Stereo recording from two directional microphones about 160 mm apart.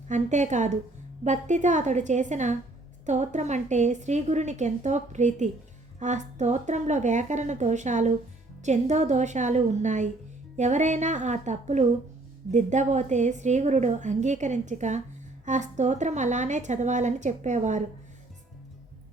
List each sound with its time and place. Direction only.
0.1 s a woman's voice: 50° right (ahead or behind)